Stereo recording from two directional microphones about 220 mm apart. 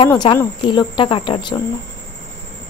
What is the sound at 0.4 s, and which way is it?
Speech, 20° left (ahead or behind).